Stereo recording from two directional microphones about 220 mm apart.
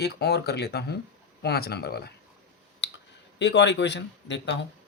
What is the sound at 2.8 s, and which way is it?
Clicking, 50° left (ahead or behind).